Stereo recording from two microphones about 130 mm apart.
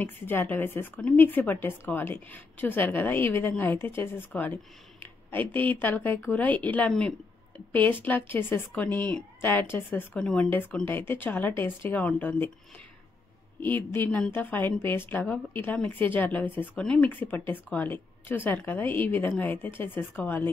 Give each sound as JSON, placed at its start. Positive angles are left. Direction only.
{"t": 0.0, "sound": "a woman's voice", "side_deg": 15}
{"t": 13.6, "sound": "a woman's voice", "side_deg": 15}